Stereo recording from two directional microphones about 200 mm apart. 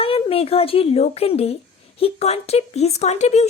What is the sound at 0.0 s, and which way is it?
Speech, 30° left (ahead or behind).